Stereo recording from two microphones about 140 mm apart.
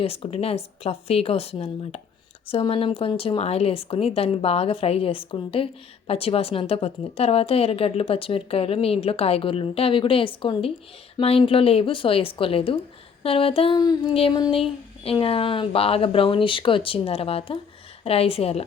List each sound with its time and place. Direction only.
0.0 s a woman's voice: 45° left (ahead or behind)
13.7 s child singing: 30° left (ahead or behind)
14.1 s a woman's voice: 45° left (ahead or behind)